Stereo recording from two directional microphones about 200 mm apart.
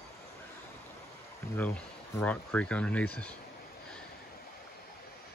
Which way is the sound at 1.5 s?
10° left (ahead or behind).